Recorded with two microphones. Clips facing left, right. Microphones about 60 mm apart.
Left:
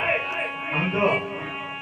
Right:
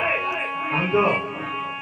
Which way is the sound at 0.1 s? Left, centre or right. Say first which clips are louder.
Right 1 dB; right.